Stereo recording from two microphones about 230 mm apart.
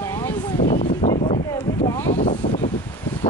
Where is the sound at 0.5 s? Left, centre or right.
Left.